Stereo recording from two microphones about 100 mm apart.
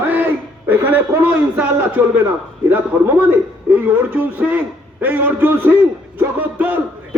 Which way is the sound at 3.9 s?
15° right (ahead or behind).